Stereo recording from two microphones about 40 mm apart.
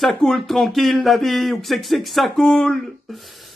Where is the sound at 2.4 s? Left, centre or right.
Centre.